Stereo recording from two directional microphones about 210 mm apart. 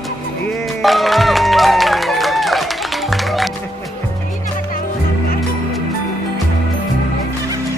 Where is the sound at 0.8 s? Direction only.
Centre (ahead or behind).